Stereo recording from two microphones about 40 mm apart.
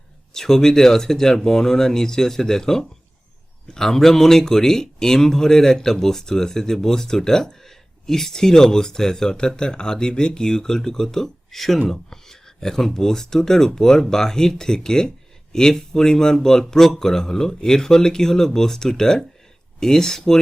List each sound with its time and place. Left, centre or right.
0.3 s speech: centre